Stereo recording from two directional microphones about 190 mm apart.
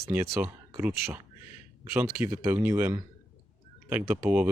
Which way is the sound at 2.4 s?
15° right (ahead or behind).